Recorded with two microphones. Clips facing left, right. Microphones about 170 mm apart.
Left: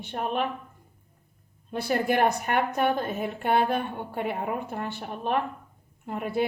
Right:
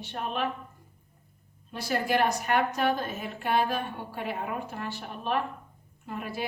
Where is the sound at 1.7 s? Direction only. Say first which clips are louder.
Left 3 dB; 55° left (ahead or behind).